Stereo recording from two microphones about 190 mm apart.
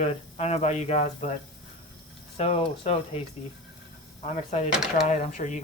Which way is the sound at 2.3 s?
30° left (ahead or behind).